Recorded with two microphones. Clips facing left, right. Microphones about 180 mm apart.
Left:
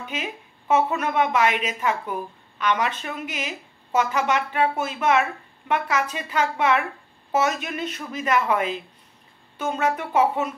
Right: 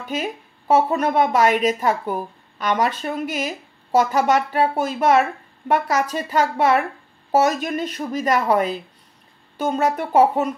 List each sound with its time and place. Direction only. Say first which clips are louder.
0.0 s a woman's voice: right 5 dB; 40° right (ahead or behind)